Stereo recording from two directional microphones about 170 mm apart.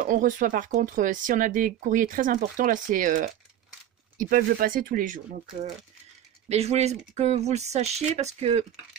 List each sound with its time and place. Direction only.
0.0 s speech: 50° right (ahead or behind)
6.5 s speech: 40° right (ahead or behind)